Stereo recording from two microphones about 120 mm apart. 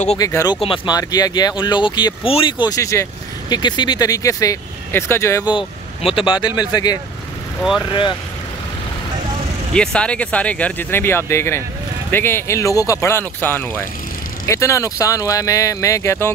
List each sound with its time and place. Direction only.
0.2 s speech: 30° left (ahead or behind)
0.6 s speech: 45° left (ahead or behind)
0.9 s speech: 30° left (ahead or behind)
2.2 s speech: 50° left (ahead or behind)
2.6 s speech: 30° left (ahead or behind)
6.0 s speech: 45° left (ahead or behind)
9.8 s speech: 10° left (ahead or behind)